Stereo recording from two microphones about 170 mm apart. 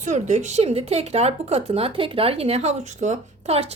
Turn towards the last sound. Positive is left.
turn(degrees=-35)  # may be behind; listen again after turning